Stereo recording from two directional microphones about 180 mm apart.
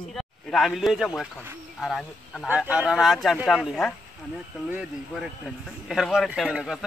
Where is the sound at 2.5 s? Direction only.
5° right (ahead or behind).